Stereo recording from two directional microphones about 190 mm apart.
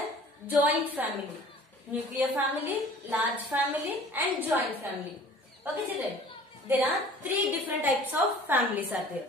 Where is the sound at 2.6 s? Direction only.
10° right (ahead or behind).